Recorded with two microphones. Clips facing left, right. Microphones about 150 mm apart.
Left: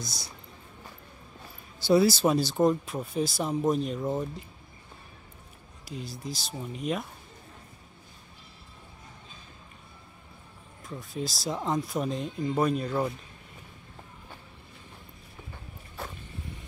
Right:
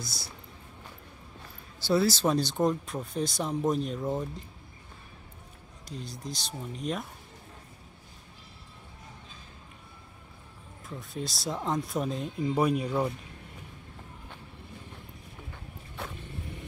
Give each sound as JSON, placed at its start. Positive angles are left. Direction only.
{"t": 0.0, "sound": "speech", "side_deg": 20}
{"t": 1.8, "sound": "speech", "side_deg": 15}
{"t": 5.9, "sound": "speech", "side_deg": 5}
{"t": 10.9, "sound": "speech", "side_deg": 0}